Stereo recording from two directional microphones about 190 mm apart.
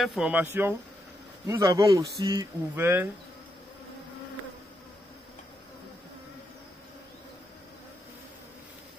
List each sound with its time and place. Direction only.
0.0 s speech: centre (ahead or behind)